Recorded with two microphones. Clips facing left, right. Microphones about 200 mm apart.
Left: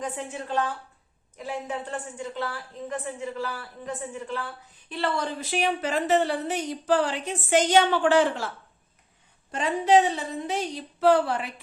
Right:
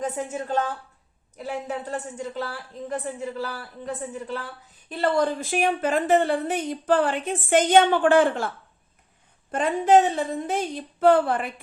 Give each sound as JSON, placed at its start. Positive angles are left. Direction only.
{"t": 0.0, "sound": "speech", "side_deg": -45}